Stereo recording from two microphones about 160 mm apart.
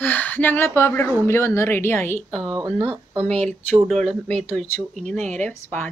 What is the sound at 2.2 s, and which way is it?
Speech, centre (ahead or behind).